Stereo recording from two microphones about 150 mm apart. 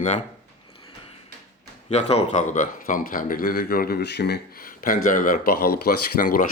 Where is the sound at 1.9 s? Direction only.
45° left (ahead or behind); by 6.5 s 65° left (ahead or behind).